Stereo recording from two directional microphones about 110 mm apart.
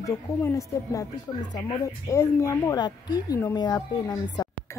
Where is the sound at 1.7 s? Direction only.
25° left (ahead or behind).